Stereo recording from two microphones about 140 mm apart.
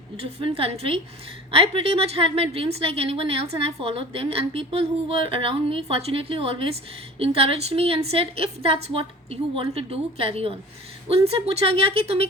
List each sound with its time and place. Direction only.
0.2 s a woman's voice: 45° right (ahead or behind)